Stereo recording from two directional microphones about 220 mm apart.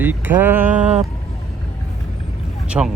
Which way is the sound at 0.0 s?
10° right (ahead or behind).